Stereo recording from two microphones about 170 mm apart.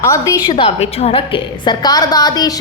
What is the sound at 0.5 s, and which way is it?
A woman's voice, 35° left (ahead or behind).